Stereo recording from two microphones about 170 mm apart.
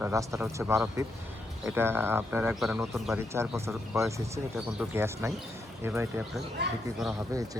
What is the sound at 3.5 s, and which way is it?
Speech, 15° right (ahead or behind).